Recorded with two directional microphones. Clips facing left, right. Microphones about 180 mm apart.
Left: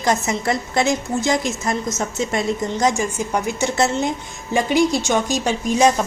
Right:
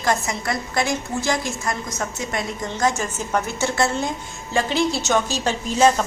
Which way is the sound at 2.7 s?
15° left (ahead or behind).